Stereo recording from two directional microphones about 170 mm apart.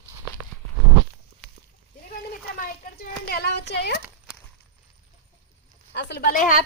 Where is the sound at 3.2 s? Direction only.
65° left (ahead or behind).